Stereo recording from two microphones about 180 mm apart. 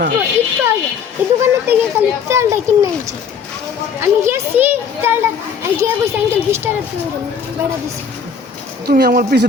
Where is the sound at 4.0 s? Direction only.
15° right (ahead or behind).